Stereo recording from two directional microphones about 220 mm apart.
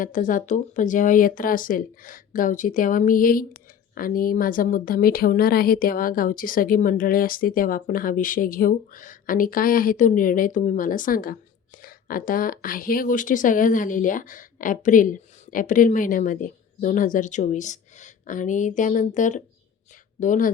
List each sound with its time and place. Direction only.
0.0 s speech: 35° left (ahead or behind)